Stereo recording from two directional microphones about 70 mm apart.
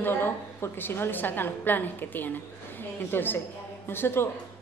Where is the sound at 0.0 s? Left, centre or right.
Left.